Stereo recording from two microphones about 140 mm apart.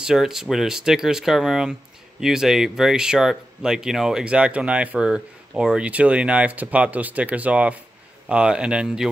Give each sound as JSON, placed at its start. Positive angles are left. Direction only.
{"t": 0.0, "sound": "speech", "side_deg": -5}